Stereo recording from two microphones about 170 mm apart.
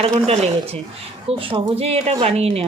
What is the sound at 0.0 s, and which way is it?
Speech, 35° right (ahead or behind).